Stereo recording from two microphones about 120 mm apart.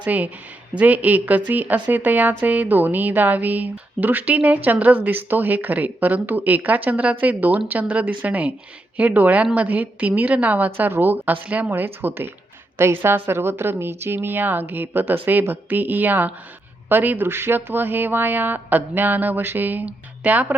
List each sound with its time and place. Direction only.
0.0 s speech: 10° right (ahead or behind)